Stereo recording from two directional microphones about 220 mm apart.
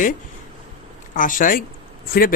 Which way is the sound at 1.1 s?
35° left (ahead or behind).